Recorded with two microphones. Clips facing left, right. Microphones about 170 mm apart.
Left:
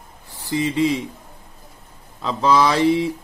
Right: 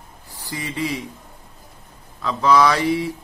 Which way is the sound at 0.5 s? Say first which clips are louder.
Left 7 dB; 25° left (ahead or behind).